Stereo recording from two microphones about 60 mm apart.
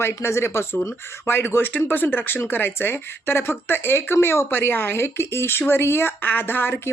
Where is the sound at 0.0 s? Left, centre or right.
Left.